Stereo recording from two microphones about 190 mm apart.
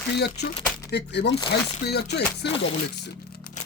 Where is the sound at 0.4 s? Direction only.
60° left (ahead or behind).